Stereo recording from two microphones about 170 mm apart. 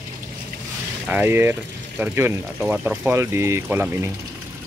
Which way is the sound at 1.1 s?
15° right (ahead or behind).